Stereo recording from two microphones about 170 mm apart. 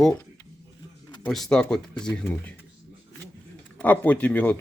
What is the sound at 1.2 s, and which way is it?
A man's voice, centre (ahead or behind).